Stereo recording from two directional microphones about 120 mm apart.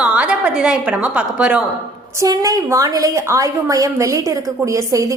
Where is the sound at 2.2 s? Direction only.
30° right (ahead or behind).